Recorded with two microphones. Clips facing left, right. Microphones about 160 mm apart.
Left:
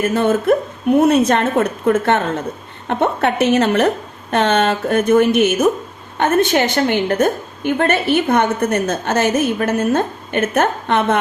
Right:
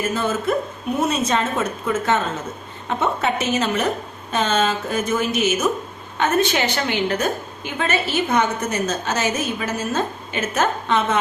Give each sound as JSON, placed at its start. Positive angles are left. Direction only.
{"t": 0.0, "sound": "a woman's voice", "side_deg": 60}